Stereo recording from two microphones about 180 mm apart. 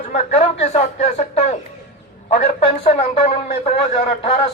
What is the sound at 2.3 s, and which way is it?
Speech, 40° left (ahead or behind).